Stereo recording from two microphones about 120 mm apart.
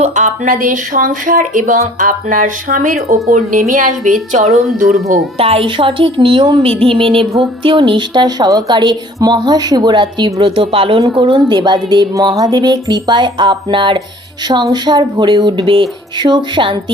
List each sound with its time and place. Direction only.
0.0 s speech: 90° right
0.9 s speech: 70° right (ahead or behind)
1.4 s a woman's voice: 90° right
5.4 s a woman's voice: 50° right (ahead or behind)